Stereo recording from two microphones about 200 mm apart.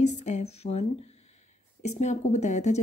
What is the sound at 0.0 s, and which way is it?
A woman's voice, 35° left (ahead or behind).